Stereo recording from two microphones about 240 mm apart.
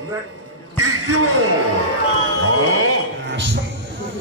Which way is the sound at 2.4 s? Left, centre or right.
Right.